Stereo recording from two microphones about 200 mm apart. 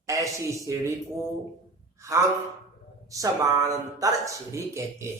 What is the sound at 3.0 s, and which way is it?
Speech, 15° right (ahead or behind).